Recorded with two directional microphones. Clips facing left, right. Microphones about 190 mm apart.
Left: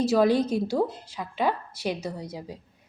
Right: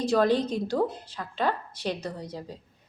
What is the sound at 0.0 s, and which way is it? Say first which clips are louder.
A woman's voice: left 2 dB; 10° left (ahead or behind).